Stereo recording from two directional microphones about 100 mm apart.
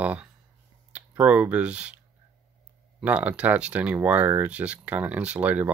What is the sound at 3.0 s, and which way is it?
Speech, 15° right (ahead or behind).